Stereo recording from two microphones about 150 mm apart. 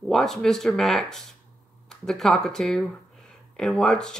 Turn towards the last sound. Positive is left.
turn(degrees=5)  # may be behind; listen again after turning